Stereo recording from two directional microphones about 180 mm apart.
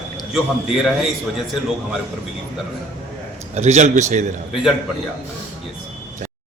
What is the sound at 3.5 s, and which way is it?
Speech, 40° right (ahead or behind).